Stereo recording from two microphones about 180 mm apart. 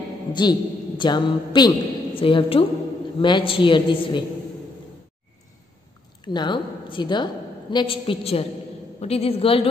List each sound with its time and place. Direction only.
0.3 s a man's voice: 25° left (ahead or behind)
6.2 s a woman's voice: 25° left (ahead or behind)